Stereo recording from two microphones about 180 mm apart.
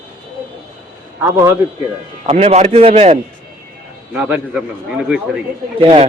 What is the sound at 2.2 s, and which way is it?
Speech, 35° right (ahead or behind).